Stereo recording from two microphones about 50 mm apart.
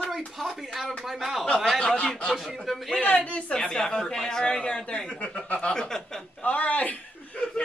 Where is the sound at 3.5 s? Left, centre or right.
Centre.